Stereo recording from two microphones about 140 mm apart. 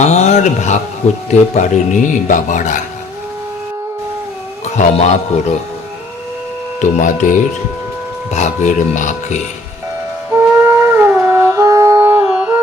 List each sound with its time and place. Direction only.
0.0 s a sound: 55° left (ahead or behind)
1.3 s speech: 65° left (ahead or behind)
4.6 s a man's voice: 55° left (ahead or behind)
7.0 s speech: 70° left (ahead or behind)
8.3 s speech: 55° left (ahead or behind)
10.4 s music: 15° right (ahead or behind)